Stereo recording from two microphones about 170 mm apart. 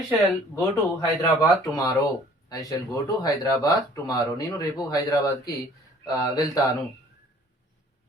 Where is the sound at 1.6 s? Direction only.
20° left (ahead or behind).